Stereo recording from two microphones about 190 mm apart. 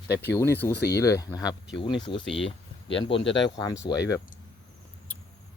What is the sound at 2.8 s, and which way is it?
Speech, 70° left (ahead or behind).